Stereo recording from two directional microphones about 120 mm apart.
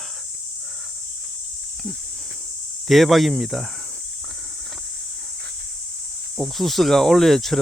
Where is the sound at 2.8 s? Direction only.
Centre (ahead or behind).